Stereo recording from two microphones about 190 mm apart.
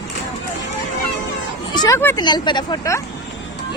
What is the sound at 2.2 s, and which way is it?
Speech, 25° left (ahead or behind).